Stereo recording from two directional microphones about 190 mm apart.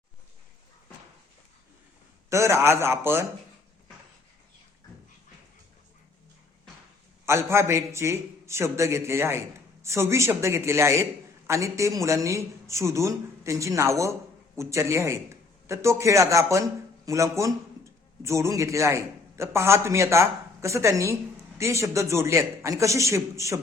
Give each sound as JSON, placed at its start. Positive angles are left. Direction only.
{"t": 2.3, "sound": "a man's voice", "side_deg": -15}
{"t": 7.3, "sound": "a man's voice", "side_deg": -15}